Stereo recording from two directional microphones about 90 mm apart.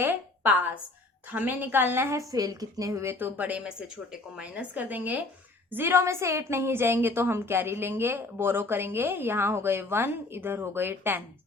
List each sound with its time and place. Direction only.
0.0 s a sound: 20° right (ahead or behind)
1.3 s a woman's voice: 20° right (ahead or behind)
2.3 s a woman's voice: 45° right (ahead or behind); by 11.2 s 25° right (ahead or behind)